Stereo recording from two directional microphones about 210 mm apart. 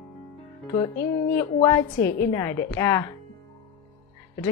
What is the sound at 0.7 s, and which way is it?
Speech, 15° left (ahead or behind).